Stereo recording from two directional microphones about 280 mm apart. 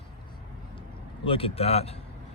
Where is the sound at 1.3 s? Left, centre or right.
Centre.